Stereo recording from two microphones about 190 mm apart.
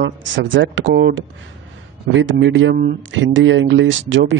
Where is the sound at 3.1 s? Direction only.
90° right.